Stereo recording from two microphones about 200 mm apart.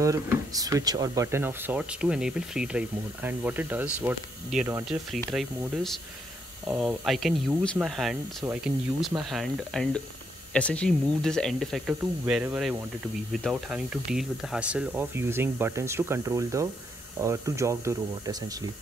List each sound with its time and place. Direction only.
0.0 s speech: 15° right (ahead or behind)
6.7 s speech: 5° right (ahead or behind)